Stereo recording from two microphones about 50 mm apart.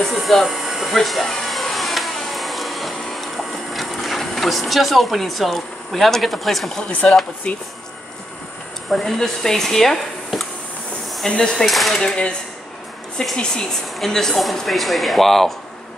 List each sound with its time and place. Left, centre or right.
0.1 s a sound: centre
7.5 s speech: centre
8.9 s speech: centre
11.6 s speech: centre
11.9 s speech: centre
13.4 s speech: centre